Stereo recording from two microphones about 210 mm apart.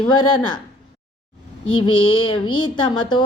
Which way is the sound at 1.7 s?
25° left (ahead or behind).